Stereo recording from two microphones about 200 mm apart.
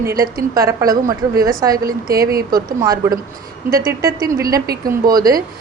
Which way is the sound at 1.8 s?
50° right (ahead or behind).